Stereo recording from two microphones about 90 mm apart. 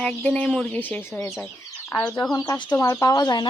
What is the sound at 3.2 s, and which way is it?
Speech, 50° left (ahead or behind).